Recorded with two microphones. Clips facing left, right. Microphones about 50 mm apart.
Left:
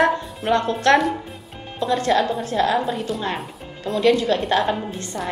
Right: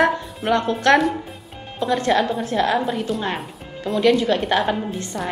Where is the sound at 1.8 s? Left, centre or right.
Right.